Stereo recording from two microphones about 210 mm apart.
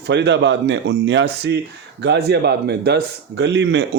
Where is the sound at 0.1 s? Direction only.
55° right (ahead or behind).